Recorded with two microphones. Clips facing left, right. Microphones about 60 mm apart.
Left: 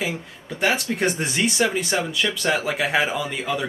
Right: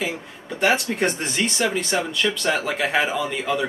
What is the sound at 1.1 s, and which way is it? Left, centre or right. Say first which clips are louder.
Speech: left 2 dB; centre.